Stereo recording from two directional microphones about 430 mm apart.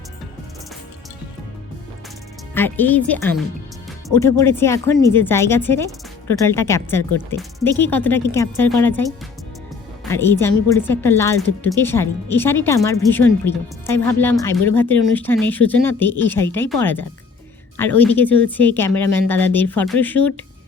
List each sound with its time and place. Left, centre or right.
2.6 s a woman's voice: centre
17.7 s speech: centre